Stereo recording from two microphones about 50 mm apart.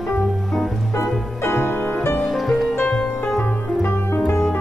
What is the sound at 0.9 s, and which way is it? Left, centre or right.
Music, left.